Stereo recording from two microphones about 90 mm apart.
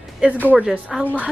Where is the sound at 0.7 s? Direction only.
5° right (ahead or behind).